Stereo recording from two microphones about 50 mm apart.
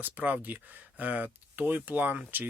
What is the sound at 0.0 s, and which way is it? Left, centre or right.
Speech, right.